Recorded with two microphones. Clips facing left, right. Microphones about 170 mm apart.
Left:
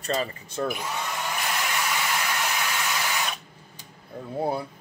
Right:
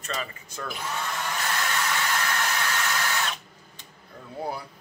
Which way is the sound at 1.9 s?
15° left (ahead or behind).